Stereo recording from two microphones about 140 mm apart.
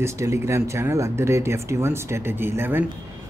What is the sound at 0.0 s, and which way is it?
Speech, 20° right (ahead or behind).